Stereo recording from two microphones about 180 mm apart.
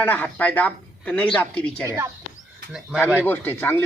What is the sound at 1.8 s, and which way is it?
Speech, 15° right (ahead or behind).